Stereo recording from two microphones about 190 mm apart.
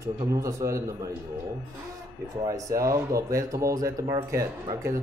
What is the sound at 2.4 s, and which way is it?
A man's voice, 15° right (ahead or behind).